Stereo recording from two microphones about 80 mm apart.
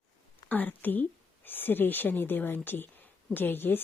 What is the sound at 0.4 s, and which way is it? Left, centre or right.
A woman's voice, centre.